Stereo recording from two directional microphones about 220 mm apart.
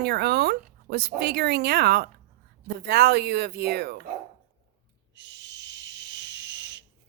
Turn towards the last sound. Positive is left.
turn(degrees=-50)  # may be behind; listen again after turning